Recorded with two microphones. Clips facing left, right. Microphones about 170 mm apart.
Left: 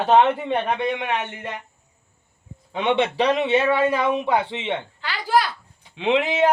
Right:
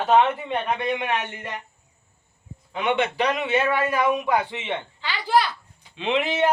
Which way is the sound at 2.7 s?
30° left (ahead or behind).